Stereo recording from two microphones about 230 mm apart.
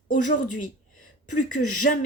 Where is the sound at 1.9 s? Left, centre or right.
Left.